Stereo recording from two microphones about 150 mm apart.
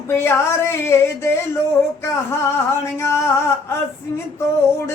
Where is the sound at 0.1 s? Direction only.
15° left (ahead or behind).